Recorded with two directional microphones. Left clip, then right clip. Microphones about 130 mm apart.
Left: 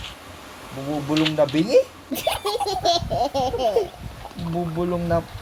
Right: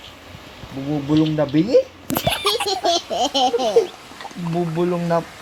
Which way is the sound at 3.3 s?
85° right.